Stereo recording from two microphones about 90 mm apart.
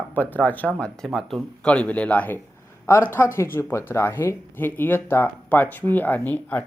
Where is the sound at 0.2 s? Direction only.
20° left (ahead or behind).